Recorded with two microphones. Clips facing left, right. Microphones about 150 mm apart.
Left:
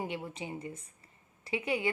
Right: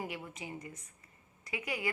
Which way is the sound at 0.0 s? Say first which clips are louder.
Left 4 dB; 30° left (ahead or behind).